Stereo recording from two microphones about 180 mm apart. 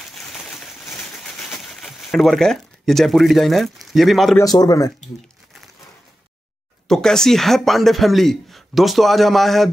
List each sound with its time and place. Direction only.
0.1 s a sound: centre (ahead or behind)
0.9 s pigeon: 10° left (ahead or behind)
1.8 s speech: centre (ahead or behind)
4.4 s speech: 20° left (ahead or behind)
6.9 s speech: 5° left (ahead or behind)